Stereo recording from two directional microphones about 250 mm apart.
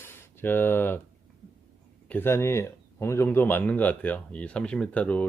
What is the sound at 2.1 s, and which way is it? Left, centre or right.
Speech, centre.